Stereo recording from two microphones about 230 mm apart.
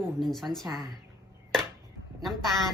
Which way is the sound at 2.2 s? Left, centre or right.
Centre.